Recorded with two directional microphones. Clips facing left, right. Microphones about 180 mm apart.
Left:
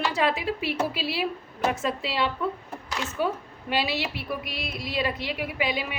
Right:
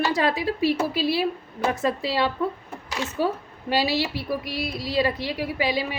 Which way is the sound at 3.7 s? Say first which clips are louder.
Right 4 dB; 35° right (ahead or behind).